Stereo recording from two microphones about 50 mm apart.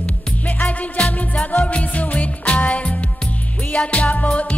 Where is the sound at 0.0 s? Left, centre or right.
Left.